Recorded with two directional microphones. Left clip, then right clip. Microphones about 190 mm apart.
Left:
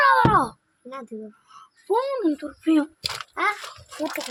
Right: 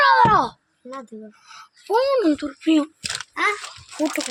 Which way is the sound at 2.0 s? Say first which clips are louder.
Right 7 dB; 25° right (ahead or behind).